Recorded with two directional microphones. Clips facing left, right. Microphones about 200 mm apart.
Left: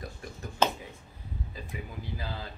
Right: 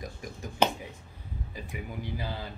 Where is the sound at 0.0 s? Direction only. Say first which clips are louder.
Right 1 dB; 15° right (ahead or behind).